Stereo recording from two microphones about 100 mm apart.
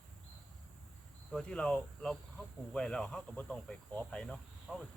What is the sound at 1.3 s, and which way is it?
Speech, 5° left (ahead or behind).